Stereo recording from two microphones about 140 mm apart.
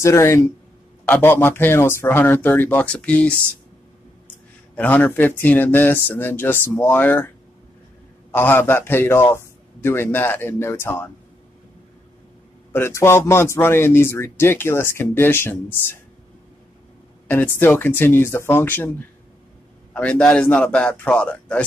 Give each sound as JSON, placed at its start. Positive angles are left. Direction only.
{"t": 0.0, "sound": "speech", "side_deg": 20}
{"t": 4.7, "sound": "speech", "side_deg": 10}
{"t": 8.3, "sound": "speech", "side_deg": 15}
{"t": 12.7, "sound": "speech", "side_deg": 15}
{"t": 17.3, "sound": "speech", "side_deg": 15}